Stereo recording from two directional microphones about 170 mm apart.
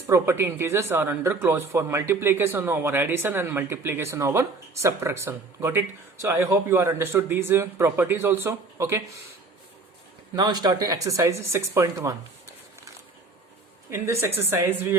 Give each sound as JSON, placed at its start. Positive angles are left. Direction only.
{"t": 0.1, "sound": "speech", "side_deg": -15}
{"t": 10.3, "sound": "speech", "side_deg": -25}
{"t": 13.9, "sound": "speech", "side_deg": -15}